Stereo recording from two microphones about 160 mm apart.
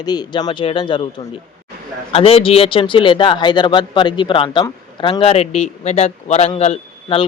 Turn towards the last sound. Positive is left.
turn(degrees=40)  # may be behind; listen again after turning